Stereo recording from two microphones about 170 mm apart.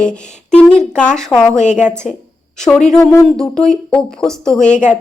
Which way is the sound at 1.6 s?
45° left (ahead or behind).